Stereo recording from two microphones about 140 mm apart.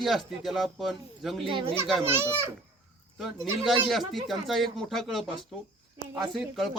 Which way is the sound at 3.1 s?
Centre (ahead or behind).